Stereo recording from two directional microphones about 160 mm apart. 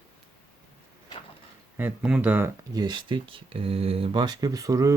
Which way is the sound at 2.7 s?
25° right (ahead or behind).